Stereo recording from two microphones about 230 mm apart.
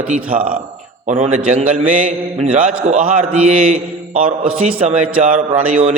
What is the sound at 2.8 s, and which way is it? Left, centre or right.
A man's voice, right.